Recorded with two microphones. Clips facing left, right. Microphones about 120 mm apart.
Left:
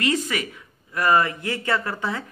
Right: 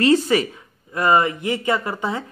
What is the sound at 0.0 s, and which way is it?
Speech, 30° right (ahead or behind).